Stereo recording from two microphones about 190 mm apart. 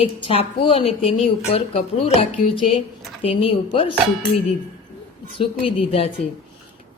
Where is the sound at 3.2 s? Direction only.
30° left (ahead or behind).